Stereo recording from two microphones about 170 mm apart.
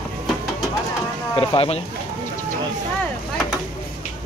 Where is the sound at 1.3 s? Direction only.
35° left (ahead or behind).